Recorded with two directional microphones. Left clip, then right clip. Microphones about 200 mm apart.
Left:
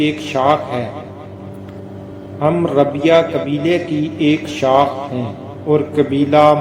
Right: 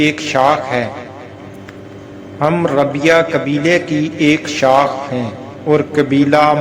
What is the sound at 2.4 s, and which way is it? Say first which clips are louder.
A man's voice: right 1 dB; 20° right (ahead or behind).